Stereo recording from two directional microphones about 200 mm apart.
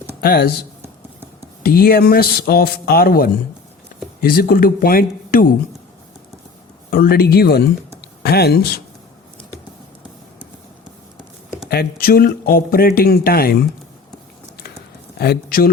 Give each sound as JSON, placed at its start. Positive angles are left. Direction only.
{"t": 0.2, "sound": "speech", "side_deg": 50}
{"t": 1.6, "sound": "speech", "side_deg": 50}
{"t": 6.9, "sound": "speech", "side_deg": 50}
{"t": 11.7, "sound": "speech", "side_deg": 50}
{"t": 15.2, "sound": "speech", "side_deg": 50}